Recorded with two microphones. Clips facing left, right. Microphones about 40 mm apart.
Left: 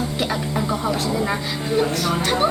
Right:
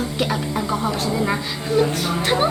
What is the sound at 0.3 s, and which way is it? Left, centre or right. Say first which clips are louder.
Music: even; centre.